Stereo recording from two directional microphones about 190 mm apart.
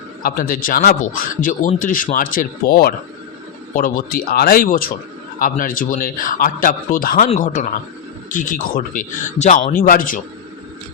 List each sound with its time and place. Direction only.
0.2 s a man's voice: 45° left (ahead or behind)